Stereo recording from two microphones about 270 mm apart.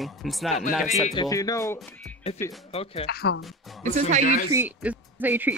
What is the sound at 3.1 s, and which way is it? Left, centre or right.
Speech, left.